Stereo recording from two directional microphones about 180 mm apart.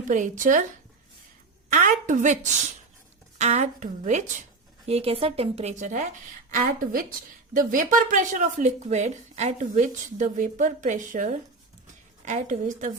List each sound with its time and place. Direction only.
0.1 s speech: 45° right (ahead or behind)
1.7 s speech: 45° right (ahead or behind)